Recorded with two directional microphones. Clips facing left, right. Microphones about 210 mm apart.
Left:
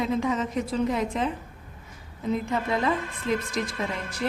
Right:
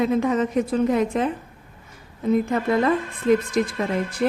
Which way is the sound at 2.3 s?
55° right (ahead or behind).